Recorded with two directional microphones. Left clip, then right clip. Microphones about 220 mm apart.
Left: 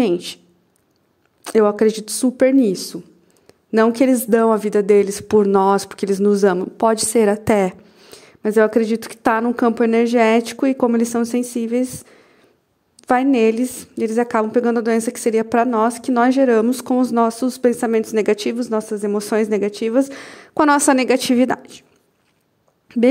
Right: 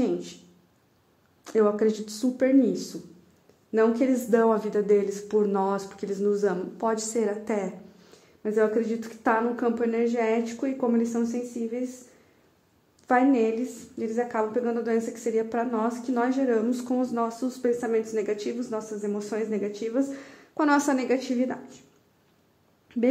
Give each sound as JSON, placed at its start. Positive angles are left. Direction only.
{"t": 0.0, "sound": "a woman's voice", "side_deg": 45}
{"t": 1.4, "sound": "a woman's voice", "side_deg": 45}
{"t": 13.0, "sound": "a woman's voice", "side_deg": 45}
{"t": 22.9, "sound": "speech", "side_deg": 45}